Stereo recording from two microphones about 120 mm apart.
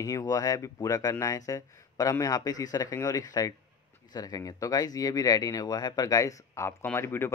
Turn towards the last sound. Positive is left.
turn(degrees=20)  # may be behind; listen again after turning